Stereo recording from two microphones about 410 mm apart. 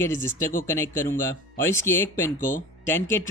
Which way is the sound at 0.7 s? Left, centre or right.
Centre.